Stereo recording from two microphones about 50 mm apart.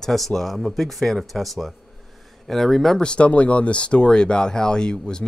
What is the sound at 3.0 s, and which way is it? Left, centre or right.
Speech, left.